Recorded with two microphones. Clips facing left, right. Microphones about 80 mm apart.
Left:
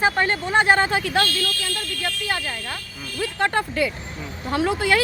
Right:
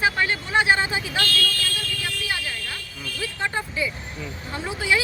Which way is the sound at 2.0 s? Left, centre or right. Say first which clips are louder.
Left 3 dB; left.